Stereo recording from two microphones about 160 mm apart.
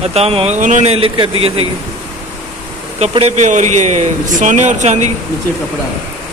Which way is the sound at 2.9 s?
40° right (ahead or behind).